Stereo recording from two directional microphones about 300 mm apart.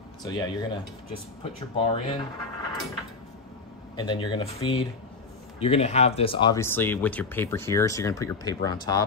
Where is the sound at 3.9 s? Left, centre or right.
Centre.